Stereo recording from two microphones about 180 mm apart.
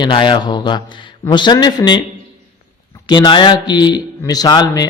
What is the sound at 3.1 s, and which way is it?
Speech, 25° left (ahead or behind).